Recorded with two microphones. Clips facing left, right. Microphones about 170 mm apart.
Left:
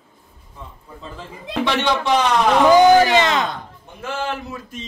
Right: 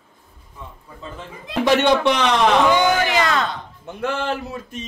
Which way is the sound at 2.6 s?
35° left (ahead or behind).